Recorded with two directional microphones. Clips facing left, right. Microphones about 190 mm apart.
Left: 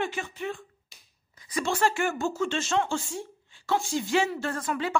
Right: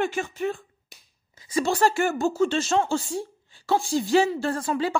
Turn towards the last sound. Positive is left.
turn(degrees=-30)  # may be behind; listen again after turning